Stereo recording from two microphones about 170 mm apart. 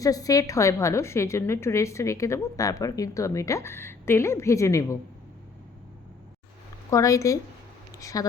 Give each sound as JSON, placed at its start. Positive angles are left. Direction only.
{"t": 0.0, "sound": "a woman's voice", "side_deg": 20}
{"t": 6.9, "sound": "a woman's voice", "side_deg": 20}